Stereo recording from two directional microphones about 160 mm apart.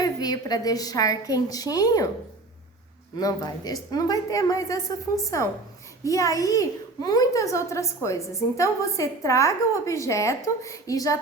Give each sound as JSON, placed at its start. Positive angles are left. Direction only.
{"t": 0.0, "sound": "a woman's voice", "side_deg": 25}
{"t": 3.2, "sound": "a child's voice", "side_deg": 25}